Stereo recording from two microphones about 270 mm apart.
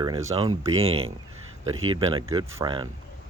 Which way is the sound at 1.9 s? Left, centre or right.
Centre.